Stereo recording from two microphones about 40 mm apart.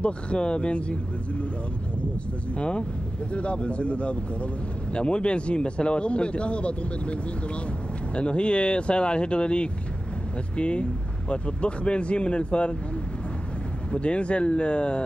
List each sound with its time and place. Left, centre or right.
0.0 s a man's voice: left
2.5 s a man's voice: left
13.9 s a man's voice: left